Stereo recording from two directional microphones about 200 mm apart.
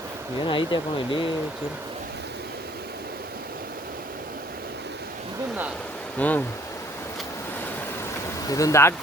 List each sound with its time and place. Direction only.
0.4 s speech: 25° left (ahead or behind)
6.1 s speech: 10° left (ahead or behind)
8.4 s speech: 15° left (ahead or behind)